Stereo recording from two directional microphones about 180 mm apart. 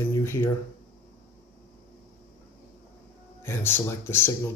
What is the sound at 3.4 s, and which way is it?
Speech, 15° left (ahead or behind).